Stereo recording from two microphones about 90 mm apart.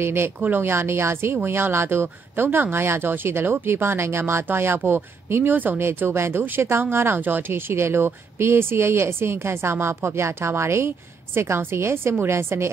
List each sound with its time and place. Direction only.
0.0 s speech: 25° right (ahead or behind)